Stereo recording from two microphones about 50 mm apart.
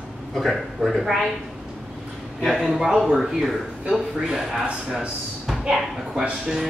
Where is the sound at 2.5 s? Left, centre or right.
Centre.